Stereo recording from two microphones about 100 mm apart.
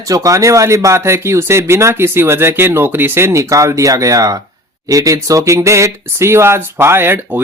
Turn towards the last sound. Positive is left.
turn(degrees=-20)  # may be behind; listen again after turning